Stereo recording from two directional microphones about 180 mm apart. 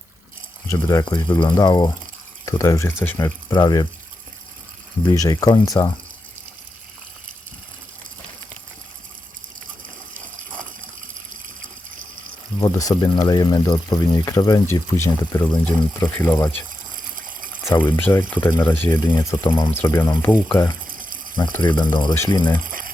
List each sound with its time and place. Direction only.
0.7 s speech: 20° left (ahead or behind)
5.0 s speech: 20° left (ahead or behind)
12.5 s speech: 20° left (ahead or behind)
17.8 s speech: 10° left (ahead or behind)
20.8 s water: 50° right (ahead or behind)
21.6 s speech: 25° left (ahead or behind)
22.5 s water: 50° right (ahead or behind)